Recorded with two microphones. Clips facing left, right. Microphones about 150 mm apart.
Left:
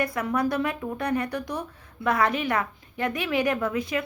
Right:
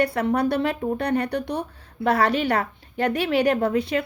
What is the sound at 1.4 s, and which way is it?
Speech, 65° right (ahead or behind).